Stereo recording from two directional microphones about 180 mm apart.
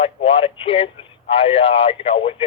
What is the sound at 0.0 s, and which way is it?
Speech, 30° left (ahead or behind).